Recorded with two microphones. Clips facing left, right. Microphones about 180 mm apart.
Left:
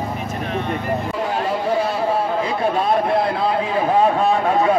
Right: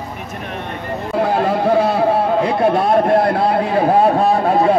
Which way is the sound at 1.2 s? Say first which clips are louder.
Right 5 dB; 60° right (ahead or behind).